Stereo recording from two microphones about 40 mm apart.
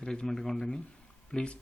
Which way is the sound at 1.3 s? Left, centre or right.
Left.